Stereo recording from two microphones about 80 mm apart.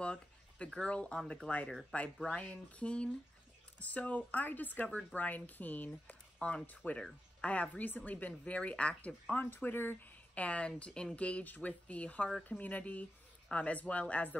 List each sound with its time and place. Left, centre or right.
0.0 s a sound: centre
0.7 s a woman's voice: centre
1.7 s a woman's voice: centre